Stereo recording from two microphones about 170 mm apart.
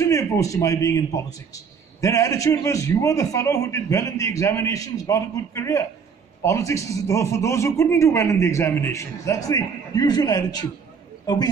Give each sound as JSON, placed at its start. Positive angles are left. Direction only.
{"t": 0.0, "sound": "a man's voice", "side_deg": 20}